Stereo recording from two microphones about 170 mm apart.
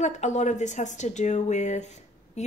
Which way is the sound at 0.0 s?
45° left (ahead or behind).